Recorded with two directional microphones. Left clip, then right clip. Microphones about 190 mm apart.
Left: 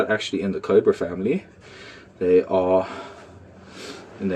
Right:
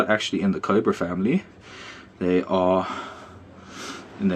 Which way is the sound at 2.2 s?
50° right (ahead or behind).